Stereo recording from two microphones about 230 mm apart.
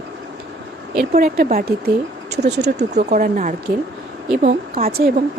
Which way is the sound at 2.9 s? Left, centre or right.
Right.